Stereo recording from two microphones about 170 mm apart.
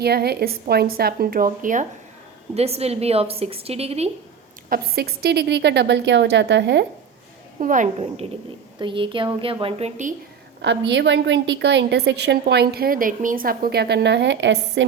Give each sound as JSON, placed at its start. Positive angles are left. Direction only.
{"t": 0.0, "sound": "a woman's voice", "side_deg": -70}
{"t": 2.6, "sound": "a woman's voice", "side_deg": -35}
{"t": 4.7, "sound": "a woman's voice", "side_deg": -65}
{"t": 7.6, "sound": "a woman's voice", "side_deg": -50}
{"t": 10.6, "sound": "a woman's voice", "side_deg": -90}